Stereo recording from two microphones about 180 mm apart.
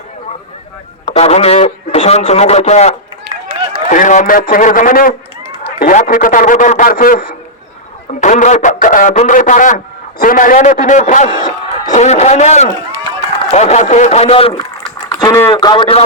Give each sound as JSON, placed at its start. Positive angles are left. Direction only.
{"t": 1.0, "sound": "speech", "side_deg": 35}
{"t": 3.2, "sound": "a sound", "side_deg": -30}
{"t": 3.8, "sound": "a man's voice", "side_deg": 45}
{"t": 15.2, "sound": "a man's voice", "side_deg": 15}